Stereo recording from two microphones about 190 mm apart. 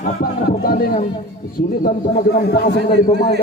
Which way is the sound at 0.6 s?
50° left (ahead or behind).